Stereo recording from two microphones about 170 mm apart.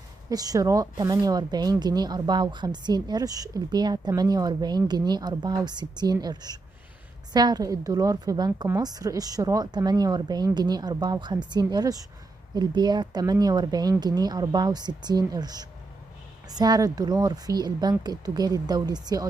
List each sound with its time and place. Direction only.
0.3 s speech: 20° right (ahead or behind)